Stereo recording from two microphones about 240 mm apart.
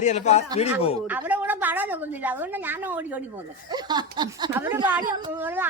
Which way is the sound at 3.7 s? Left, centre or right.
Centre.